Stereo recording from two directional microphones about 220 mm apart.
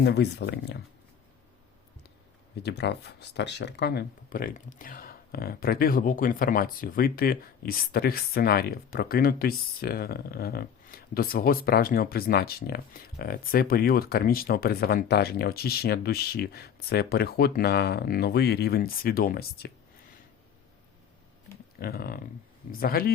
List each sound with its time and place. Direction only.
0.0 s speech: 50° left (ahead or behind)
2.6 s speech: 50° left (ahead or behind)
21.8 s speech: 45° left (ahead or behind)